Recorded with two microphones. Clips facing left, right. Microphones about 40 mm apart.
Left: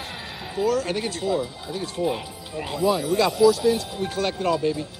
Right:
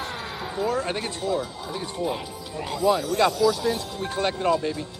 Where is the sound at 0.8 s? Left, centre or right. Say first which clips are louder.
Left 2 dB; centre.